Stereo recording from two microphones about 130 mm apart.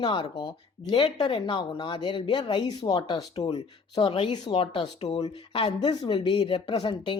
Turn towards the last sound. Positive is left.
turn(degrees=40)  # may be behind; listen again after turning